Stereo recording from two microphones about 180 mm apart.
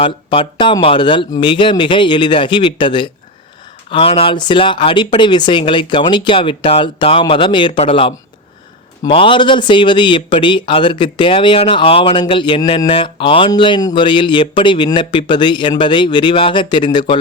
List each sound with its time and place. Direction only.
0.0 s speech: 30° left (ahead or behind)